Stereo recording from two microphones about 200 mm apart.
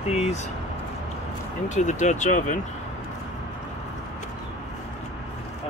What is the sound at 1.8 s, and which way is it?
Speech, 35° left (ahead or behind).